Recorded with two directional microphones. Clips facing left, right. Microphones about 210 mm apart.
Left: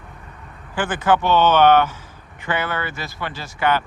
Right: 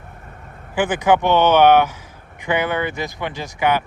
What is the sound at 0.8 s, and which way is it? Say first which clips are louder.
Speech: right 3 dB; 10° right (ahead or behind).